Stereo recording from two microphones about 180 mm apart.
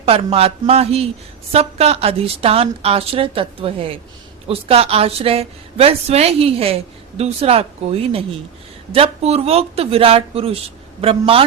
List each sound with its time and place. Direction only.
0.0 s a woman's voice: 35° right (ahead or behind)